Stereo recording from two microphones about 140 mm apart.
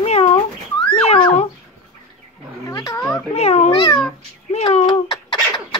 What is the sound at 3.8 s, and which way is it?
Speech, 30° left (ahead or behind).